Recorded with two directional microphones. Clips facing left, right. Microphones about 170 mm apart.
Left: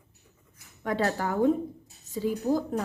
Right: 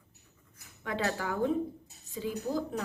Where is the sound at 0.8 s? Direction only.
40° left (ahead or behind).